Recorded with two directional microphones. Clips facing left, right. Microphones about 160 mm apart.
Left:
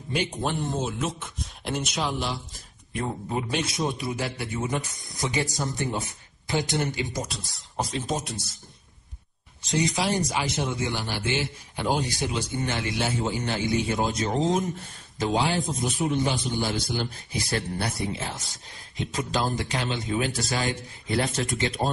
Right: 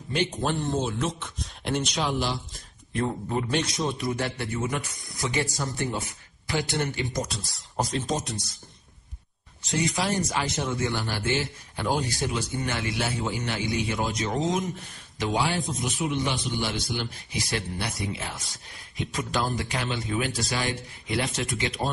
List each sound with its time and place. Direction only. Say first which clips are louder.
0.1 s speech: right 1 dB; 10° left (ahead or behind)
2.9 s a man's voice: right 2 dB; 15° left (ahead or behind)
4.6 s a man's voice: left 1 dB; 20° left (ahead or behind)
7.2 s speech: right 2 dB; centre (ahead or behind)
9.7 s a man's voice: left 1 dB; 15° left (ahead or behind)
12.4 s a man's voice: left 1 dB; 25° left (ahead or behind)
16.1 s a man's voice: left 2 dB; 40° left (ahead or behind)
18.1 s a man's voice: left 2 dB; 25° left (ahead or behind)